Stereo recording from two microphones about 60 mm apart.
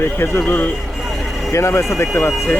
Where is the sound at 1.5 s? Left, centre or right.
Left.